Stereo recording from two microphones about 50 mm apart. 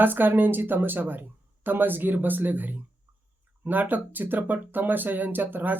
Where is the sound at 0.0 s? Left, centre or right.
Right.